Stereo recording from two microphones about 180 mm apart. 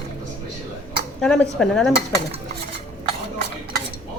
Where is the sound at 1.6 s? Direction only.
5° left (ahead or behind).